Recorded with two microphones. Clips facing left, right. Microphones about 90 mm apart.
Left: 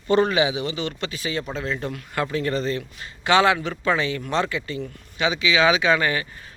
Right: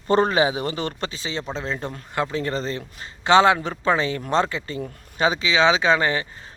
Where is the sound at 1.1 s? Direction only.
30° right (ahead or behind).